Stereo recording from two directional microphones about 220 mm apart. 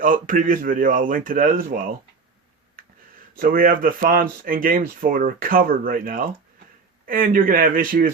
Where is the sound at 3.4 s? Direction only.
40° right (ahead or behind).